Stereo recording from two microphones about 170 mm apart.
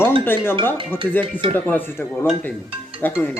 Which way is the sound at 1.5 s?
10° left (ahead or behind).